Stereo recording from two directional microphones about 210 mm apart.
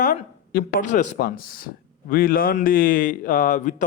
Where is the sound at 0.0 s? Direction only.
40° left (ahead or behind).